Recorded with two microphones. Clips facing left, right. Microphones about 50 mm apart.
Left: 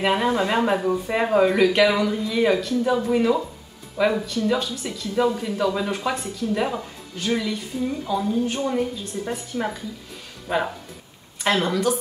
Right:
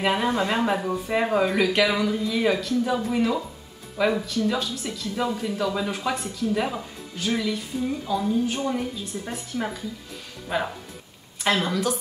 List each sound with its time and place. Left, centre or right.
0.0 s speech: centre